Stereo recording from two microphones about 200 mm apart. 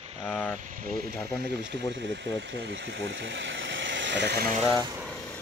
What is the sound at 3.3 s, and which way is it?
Vehicle, 65° right (ahead or behind).